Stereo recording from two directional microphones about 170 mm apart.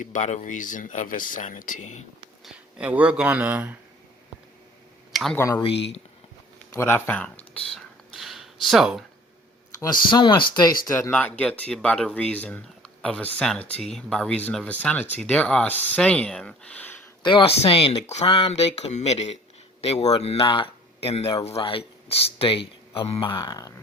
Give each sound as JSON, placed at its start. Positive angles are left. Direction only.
{"t": 0.0, "sound": "speech", "side_deg": 45}
{"t": 2.4, "sound": "speech", "side_deg": -5}
{"t": 5.1, "sound": "speech", "side_deg": 0}
{"t": 5.4, "sound": "speech", "side_deg": 15}
{"t": 6.7, "sound": "speech", "side_deg": 15}
{"t": 7.5, "sound": "a sound", "side_deg": 0}
{"t": 9.8, "sound": "speech", "side_deg": 25}
{"t": 17.2, "sound": "speech", "side_deg": 30}